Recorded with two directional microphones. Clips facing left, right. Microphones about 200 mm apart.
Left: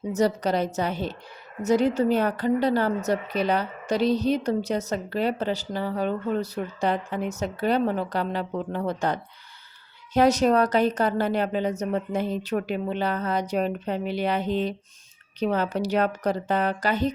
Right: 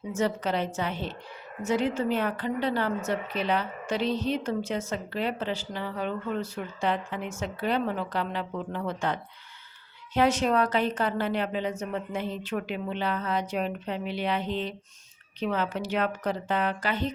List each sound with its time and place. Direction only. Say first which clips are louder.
0.1 s a woman's voice: left 4 dB; 40° left (ahead or behind)